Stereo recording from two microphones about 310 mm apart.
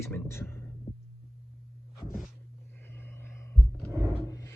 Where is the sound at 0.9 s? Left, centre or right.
Centre.